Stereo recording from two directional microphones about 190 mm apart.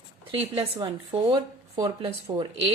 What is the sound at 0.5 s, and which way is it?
A woman's voice, 25° right (ahead or behind).